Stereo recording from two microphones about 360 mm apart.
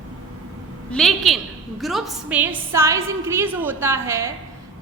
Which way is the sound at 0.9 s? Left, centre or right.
Centre.